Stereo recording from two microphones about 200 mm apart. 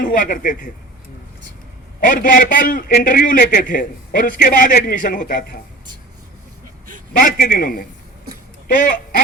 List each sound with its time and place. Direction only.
0.0 s a man's voice: 40° left (ahead or behind)
2.0 s a man's voice: 45° left (ahead or behind)
7.2 s a man's voice: 45° left (ahead or behind)